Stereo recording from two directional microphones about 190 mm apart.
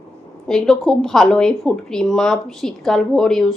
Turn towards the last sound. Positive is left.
turn(degrees=5)  # may be behind; listen again after turning